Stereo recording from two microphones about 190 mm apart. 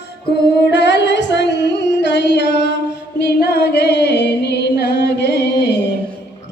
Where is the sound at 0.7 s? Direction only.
65° left (ahead or behind).